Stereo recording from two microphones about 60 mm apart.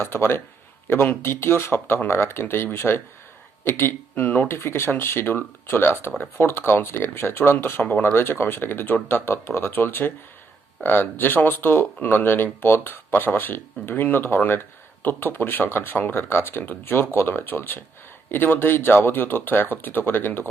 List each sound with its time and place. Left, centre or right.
0.0 s speech: left
4.5 s speech: left
7.8 s speech: left
8.0 s speech: left